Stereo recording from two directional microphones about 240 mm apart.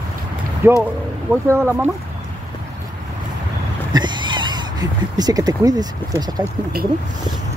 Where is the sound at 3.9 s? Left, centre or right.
Centre.